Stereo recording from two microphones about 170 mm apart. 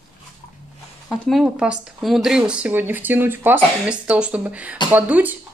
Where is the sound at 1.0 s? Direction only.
Centre (ahead or behind).